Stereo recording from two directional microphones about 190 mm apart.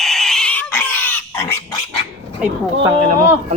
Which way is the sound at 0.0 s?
Centre (ahead or behind).